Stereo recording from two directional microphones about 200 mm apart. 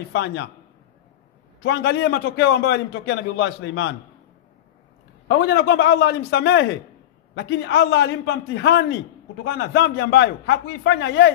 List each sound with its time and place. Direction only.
0.1 s a man's voice: 65° left (ahead or behind)
1.6 s a man's voice: 60° left (ahead or behind)
5.4 s a man's voice: 55° left (ahead or behind)